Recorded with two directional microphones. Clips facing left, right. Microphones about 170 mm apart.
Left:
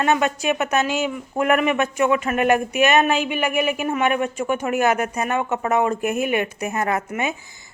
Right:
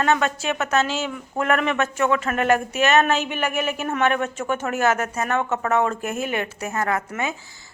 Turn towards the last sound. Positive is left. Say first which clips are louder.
# left 2 dB
turn(degrees=20)  # may be behind; listen again after turning